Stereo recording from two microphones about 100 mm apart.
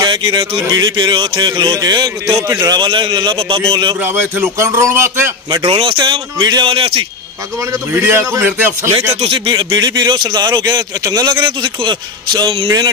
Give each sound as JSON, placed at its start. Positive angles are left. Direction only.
{"t": 0.0, "sound": "a sound", "side_deg": -45}
{"t": 0.7, "sound": "speech", "side_deg": -50}
{"t": 2.5, "sound": "a man's voice", "side_deg": -35}
{"t": 2.8, "sound": "speech", "side_deg": -50}
{"t": 4.0, "sound": "a man's voice", "side_deg": -20}
{"t": 5.7, "sound": "speech", "side_deg": -60}
{"t": 5.9, "sound": "speech", "side_deg": -45}
{"t": 7.9, "sound": "a man's voice", "side_deg": -25}
{"t": 9.5, "sound": "speech", "side_deg": -45}